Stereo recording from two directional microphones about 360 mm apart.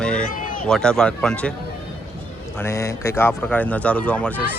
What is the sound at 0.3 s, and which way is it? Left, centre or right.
Run, left.